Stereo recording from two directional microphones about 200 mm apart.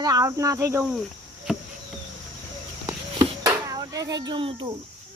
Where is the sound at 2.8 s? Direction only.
20° right (ahead or behind).